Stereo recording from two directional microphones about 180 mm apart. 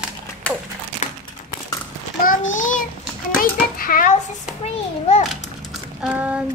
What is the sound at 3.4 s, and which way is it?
Children playing, 50° left (ahead or behind).